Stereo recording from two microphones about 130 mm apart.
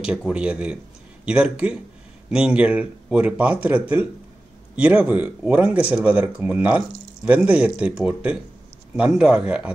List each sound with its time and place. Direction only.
0.3 s speech: 10° right (ahead or behind)